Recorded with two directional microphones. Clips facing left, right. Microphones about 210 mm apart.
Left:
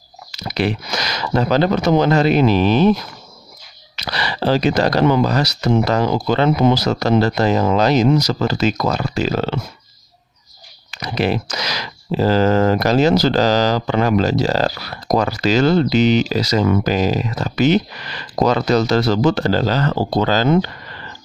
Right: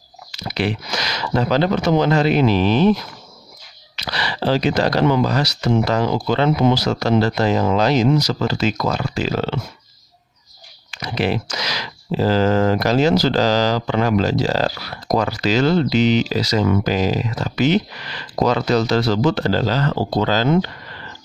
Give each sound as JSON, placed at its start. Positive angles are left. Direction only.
{"t": 0.3, "sound": "speech", "side_deg": 40}
{"t": 10.9, "sound": "speech", "side_deg": 40}